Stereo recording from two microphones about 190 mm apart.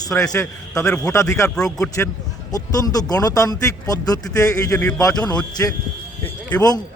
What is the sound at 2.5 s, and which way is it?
Speech, 20° left (ahead or behind).